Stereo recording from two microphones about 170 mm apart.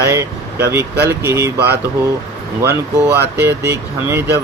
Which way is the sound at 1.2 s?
15° right (ahead or behind).